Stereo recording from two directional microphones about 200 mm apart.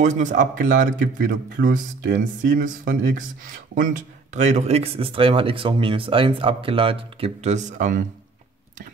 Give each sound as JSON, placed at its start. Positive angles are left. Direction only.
{"t": 0.0, "sound": "speech", "side_deg": -35}